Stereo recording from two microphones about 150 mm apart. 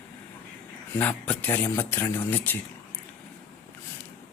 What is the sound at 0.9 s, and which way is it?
Speech, 10° left (ahead or behind).